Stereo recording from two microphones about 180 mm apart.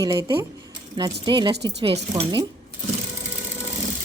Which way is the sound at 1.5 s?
70° right (ahead or behind).